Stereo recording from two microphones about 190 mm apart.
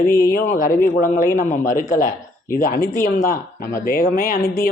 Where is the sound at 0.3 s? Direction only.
50° left (ahead or behind).